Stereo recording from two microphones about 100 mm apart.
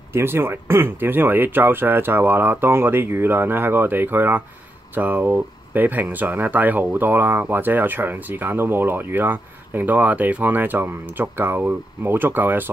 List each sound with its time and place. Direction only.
0.1 s speech: 25° right (ahead or behind)